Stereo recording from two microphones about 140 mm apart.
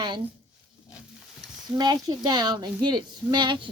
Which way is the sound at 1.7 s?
30° right (ahead or behind).